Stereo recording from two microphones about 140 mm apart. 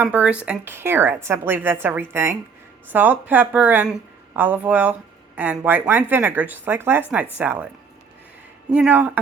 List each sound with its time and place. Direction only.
0.0 s a woman's voice: 10° right (ahead or behind)
8.7 s a woman's voice: 10° right (ahead or behind)